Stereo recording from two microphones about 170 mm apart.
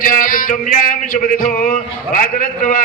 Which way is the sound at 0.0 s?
55° left (ahead or behind).